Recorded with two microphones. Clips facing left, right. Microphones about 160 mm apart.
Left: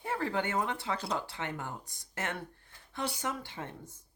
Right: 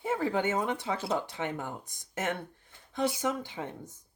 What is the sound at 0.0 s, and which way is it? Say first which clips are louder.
Speech: right 4 dB; 15° right (ahead or behind).